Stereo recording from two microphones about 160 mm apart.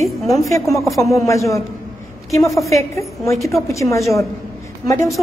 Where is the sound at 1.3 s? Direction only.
20° left (ahead or behind).